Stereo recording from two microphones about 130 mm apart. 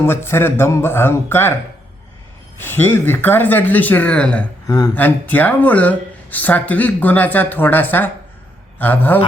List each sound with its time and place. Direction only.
0.0 s speech: 20° left (ahead or behind)
2.6 s speech: 15° left (ahead or behind)
4.6 s speech: 30° left (ahead or behind)
4.9 s speech: 15° left (ahead or behind)